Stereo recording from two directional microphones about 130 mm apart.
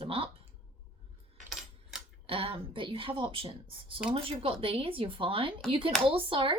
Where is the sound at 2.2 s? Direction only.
45° right (ahead or behind).